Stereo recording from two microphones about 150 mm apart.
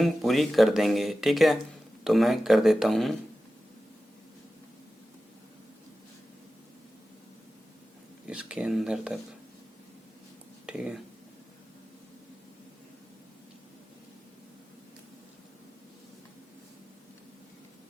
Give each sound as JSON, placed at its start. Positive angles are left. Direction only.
{"t": 0.0, "sound": "speech", "side_deg": 0}
{"t": 8.3, "sound": "speech", "side_deg": -5}
{"t": 10.7, "sound": "speech", "side_deg": -5}